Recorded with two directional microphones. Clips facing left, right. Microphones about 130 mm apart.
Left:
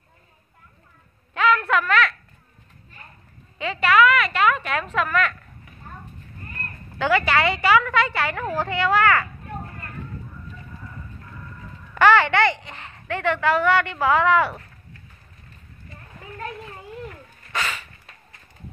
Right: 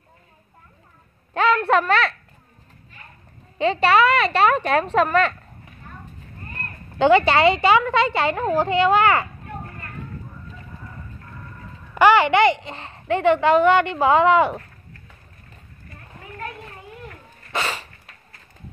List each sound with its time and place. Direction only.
1.3 s a sound: 30° right (ahead or behind)
3.5 s speech: 30° right (ahead or behind)
7.0 s a woman's voice: 25° right (ahead or behind)
11.9 s a woman's voice: 15° right (ahead or behind)
17.5 s dog: 30° right (ahead or behind)